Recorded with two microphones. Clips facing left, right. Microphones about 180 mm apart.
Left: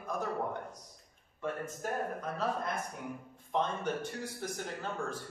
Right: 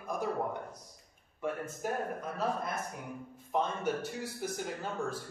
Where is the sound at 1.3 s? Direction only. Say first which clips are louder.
Right 1 dB; 10° right (ahead or behind).